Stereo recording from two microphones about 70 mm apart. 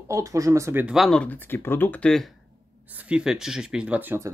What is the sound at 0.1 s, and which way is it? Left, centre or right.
Speech, right.